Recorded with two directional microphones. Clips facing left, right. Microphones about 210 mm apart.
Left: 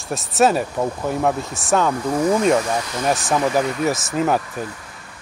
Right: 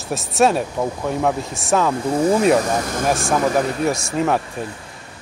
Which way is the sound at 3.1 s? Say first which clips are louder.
Even; centre (ahead or behind).